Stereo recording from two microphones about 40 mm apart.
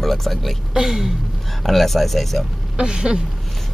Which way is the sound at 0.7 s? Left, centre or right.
Centre.